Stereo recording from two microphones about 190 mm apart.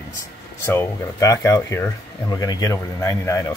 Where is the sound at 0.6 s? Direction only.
15° left (ahead or behind).